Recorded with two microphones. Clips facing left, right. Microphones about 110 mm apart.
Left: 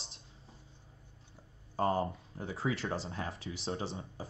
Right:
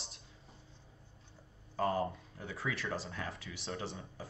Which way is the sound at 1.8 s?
30° left (ahead or behind).